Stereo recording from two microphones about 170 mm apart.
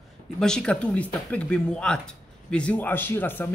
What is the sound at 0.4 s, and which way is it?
Speech, 5° left (ahead or behind).